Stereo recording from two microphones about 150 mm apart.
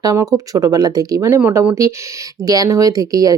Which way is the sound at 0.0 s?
25° right (ahead or behind).